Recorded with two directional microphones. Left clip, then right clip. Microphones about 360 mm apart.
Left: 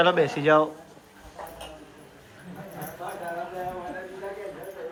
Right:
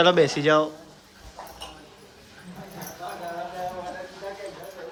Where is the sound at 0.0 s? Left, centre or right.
Centre.